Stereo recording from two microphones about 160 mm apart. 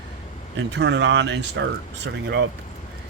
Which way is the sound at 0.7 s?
90° right.